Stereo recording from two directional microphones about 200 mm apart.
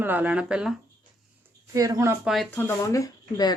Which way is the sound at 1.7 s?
15° right (ahead or behind).